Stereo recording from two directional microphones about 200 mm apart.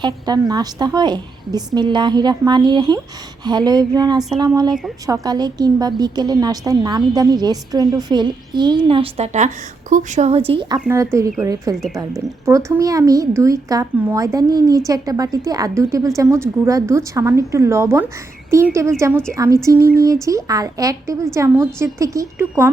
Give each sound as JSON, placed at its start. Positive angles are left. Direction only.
{"t": 0.0, "sound": "a woman's voice", "side_deg": -20}
{"t": 10.8, "sound": "speech", "side_deg": -15}